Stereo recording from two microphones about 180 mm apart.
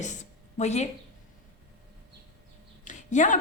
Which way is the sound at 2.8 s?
40° left (ahead or behind).